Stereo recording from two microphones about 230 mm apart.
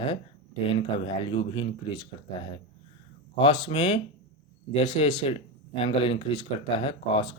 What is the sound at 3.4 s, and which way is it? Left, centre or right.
Speech, left.